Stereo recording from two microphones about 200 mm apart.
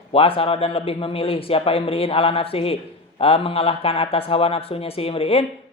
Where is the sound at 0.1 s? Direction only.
30° left (ahead or behind).